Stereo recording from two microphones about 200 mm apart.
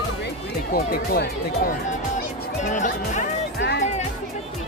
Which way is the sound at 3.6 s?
55° left (ahead or behind).